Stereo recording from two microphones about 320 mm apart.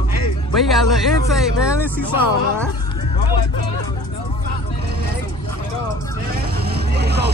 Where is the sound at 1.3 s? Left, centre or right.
Centre.